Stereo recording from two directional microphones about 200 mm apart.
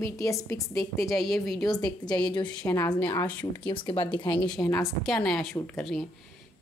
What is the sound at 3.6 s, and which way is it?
Speech, 25° left (ahead or behind).